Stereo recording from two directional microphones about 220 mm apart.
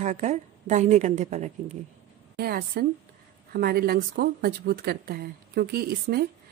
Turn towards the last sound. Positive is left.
turn(degrees=-45)  # may be behind; listen again after turning